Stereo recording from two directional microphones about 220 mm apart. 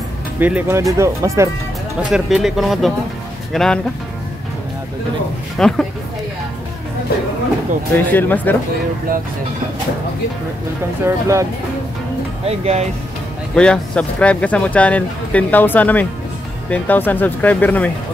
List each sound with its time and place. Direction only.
0.4 s speech: 5° right (ahead or behind)
2.0 s speech: centre (ahead or behind)
5.6 s speech: centre (ahead or behind)
7.9 s speech: 10° left (ahead or behind)
11.1 s speech: 15° right (ahead or behind)
12.4 s speech: 30° right (ahead or behind)
13.6 s speech: 5° left (ahead or behind)